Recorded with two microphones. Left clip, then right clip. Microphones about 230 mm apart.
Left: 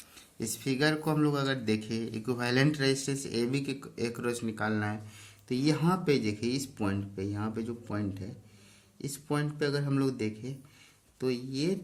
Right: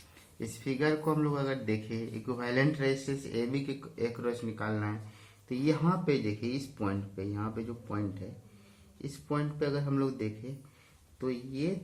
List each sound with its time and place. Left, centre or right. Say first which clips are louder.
0.3 s a man's voice: left 3 dB; left